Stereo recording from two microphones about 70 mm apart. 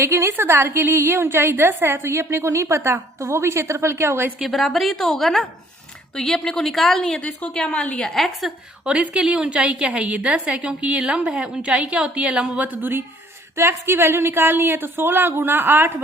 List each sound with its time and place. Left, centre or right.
0.0 s a woman's voice: right
4.4 s a woman's voice: centre
7.2 s a woman's voice: centre
8.8 s a woman's voice: centre; by 15.9 s right